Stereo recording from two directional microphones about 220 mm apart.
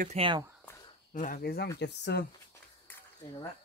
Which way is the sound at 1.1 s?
35° left (ahead or behind).